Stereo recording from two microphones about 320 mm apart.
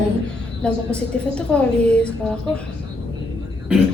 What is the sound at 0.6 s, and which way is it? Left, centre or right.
Speech, centre.